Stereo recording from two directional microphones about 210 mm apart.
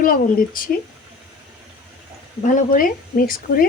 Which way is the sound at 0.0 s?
40° left (ahead or behind).